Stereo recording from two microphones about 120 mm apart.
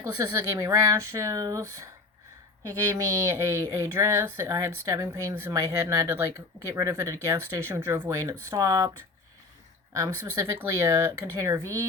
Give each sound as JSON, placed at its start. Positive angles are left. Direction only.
{"t": 0.0, "sound": "speech", "side_deg": -25}